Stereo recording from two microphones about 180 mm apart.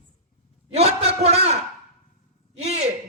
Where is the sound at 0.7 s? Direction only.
35° right (ahead or behind).